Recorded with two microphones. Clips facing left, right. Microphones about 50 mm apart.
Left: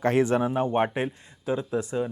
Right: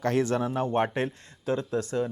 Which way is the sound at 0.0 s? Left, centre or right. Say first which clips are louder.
Left 3 dB; left.